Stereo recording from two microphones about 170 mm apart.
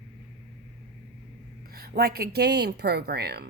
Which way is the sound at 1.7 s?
65° right (ahead or behind).